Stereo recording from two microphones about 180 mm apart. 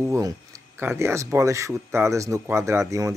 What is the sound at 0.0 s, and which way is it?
Speech, 15° right (ahead or behind).